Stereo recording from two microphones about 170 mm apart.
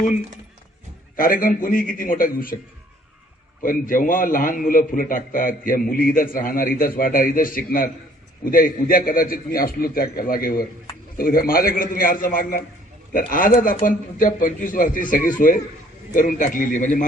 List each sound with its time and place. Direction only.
1.1 s a man's voice: 55° left (ahead or behind)
3.6 s a man's voice: 55° left (ahead or behind)